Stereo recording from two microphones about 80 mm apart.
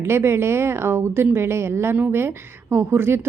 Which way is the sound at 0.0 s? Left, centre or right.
Right.